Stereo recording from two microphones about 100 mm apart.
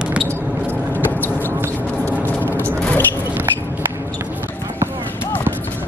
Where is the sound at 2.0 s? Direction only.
20° left (ahead or behind).